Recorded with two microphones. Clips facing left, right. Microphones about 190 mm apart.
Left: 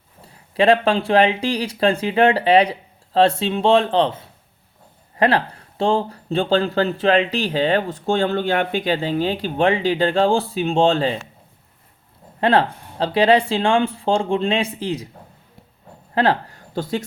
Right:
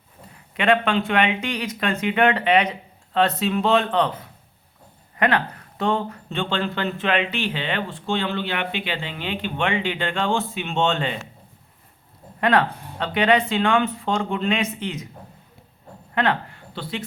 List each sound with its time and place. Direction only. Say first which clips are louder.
0.5 s speech: left 4 dB; 35° left (ahead or behind)
12.4 s speech: left 3 dB; 30° left (ahead or behind)
16.1 s speech: left 4 dB; 35° left (ahead or behind)